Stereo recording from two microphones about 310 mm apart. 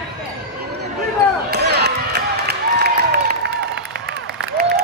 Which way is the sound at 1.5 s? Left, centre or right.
Right.